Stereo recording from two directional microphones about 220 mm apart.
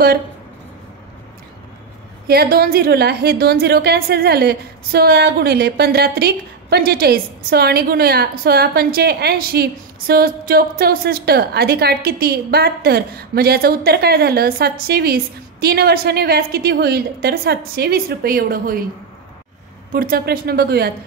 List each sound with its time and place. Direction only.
2.2 s a woman's voice: 45° right (ahead or behind)
19.9 s a woman's voice: 40° right (ahead or behind)